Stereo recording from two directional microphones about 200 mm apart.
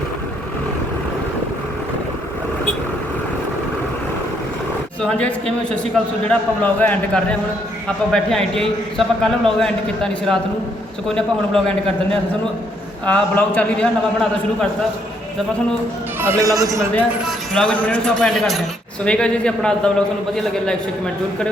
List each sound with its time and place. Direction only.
5.0 s a man's voice: 5° left (ahead or behind)
13.1 s a man's voice: 10° left (ahead or behind)
16.2 s a man's voice: 15° right (ahead or behind)
16.9 s a man's voice: 5° left (ahead or behind)